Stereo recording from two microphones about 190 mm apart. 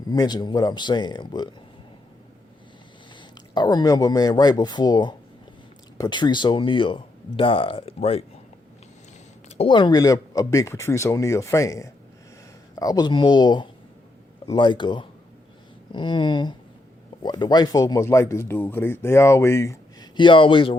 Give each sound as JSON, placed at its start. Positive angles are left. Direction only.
{"t": 0.1, "sound": "speech", "side_deg": 20}
{"t": 3.2, "sound": "speech", "side_deg": 25}
{"t": 9.6, "sound": "speech", "side_deg": 25}